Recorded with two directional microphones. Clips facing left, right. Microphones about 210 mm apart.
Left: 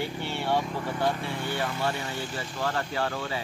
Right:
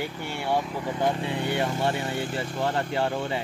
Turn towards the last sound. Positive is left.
turn(degrees=-25)  # may be behind; listen again after turning